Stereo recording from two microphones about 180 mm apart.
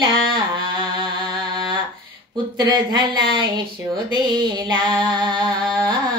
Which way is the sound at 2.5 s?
25° right (ahead or behind).